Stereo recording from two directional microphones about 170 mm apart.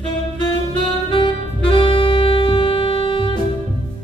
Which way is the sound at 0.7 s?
30° left (ahead or behind).